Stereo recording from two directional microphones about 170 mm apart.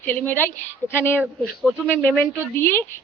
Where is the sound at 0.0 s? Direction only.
10° left (ahead or behind).